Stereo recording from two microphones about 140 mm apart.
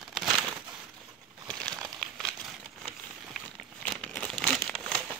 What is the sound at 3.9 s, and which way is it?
Crumpling, 5° left (ahead or behind).